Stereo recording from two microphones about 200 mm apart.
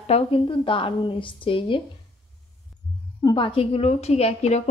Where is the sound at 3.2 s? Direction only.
25° left (ahead or behind).